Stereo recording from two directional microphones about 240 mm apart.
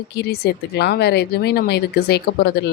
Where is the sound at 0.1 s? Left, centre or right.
Left.